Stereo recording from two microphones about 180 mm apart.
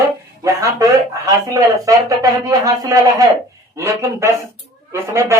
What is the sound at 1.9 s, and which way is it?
A man's voice, 20° right (ahead or behind).